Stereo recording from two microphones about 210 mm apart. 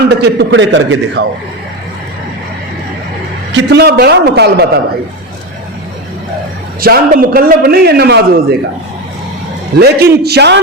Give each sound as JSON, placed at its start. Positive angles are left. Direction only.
{"t": 0.2, "sound": "a man's voice", "side_deg": -55}
{"t": 3.5, "sound": "a man's voice", "side_deg": -50}
{"t": 6.8, "sound": "a man's voice", "side_deg": -45}
{"t": 9.7, "sound": "a man's voice", "side_deg": -50}